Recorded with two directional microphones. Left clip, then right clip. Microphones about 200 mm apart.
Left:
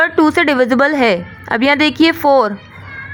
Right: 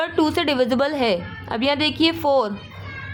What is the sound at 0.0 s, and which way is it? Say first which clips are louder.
A woman's voice: left 9 dB; 25° left (ahead or behind).